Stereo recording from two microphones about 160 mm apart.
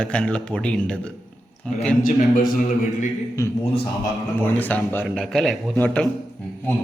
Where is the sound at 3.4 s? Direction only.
20° left (ahead or behind).